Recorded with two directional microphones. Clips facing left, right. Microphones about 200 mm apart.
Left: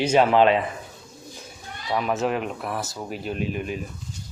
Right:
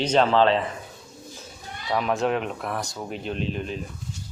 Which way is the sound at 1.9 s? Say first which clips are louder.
Even; centre (ahead or behind).